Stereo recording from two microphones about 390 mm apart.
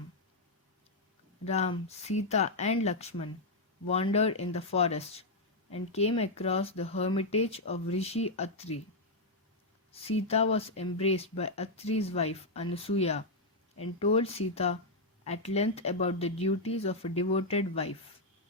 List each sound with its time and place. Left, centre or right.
1.5 s speech: centre
9.9 s speech: centre